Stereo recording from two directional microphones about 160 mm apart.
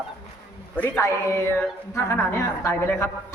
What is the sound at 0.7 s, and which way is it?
A woman's voice, 10° left (ahead or behind).